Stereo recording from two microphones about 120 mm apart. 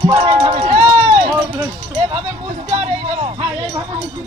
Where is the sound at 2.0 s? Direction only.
50° right (ahead or behind).